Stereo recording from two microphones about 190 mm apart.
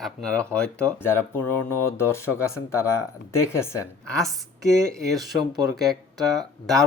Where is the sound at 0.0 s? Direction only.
5° left (ahead or behind).